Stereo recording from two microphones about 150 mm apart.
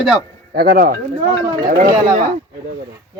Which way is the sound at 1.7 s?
75° right (ahead or behind).